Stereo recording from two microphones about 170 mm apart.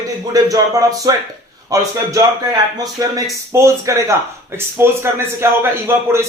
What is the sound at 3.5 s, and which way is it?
Speech, 15° right (ahead or behind).